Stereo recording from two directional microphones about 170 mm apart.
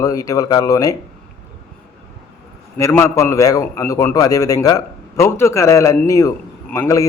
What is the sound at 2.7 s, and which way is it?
A man's voice, 15° left (ahead or behind).